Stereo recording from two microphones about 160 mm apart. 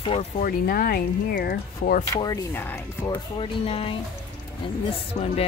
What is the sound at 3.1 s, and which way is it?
Speech, 35° left (ahead or behind).